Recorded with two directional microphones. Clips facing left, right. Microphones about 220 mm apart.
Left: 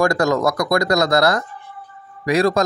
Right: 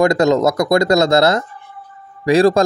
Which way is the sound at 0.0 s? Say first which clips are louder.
Right 4 dB; 20° right (ahead or behind).